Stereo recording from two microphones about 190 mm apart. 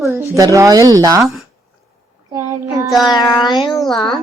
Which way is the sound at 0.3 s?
15° right (ahead or behind).